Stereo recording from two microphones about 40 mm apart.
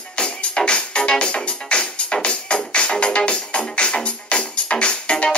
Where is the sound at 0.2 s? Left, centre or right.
Left.